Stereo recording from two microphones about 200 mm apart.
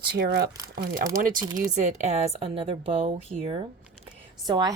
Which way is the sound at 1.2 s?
40° right (ahead or behind).